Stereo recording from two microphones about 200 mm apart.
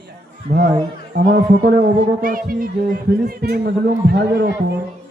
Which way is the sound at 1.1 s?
60° right (ahead or behind).